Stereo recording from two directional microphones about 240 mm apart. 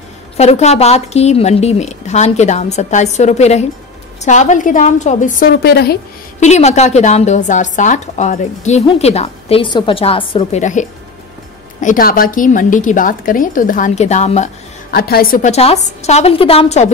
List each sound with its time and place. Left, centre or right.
0.4 s a woman's voice: left
6.4 s a woman's voice: left